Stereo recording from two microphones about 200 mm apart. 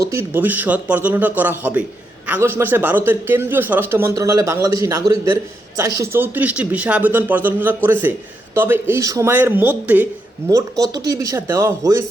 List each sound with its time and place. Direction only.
0.0 s a man's voice: 15° right (ahead or behind)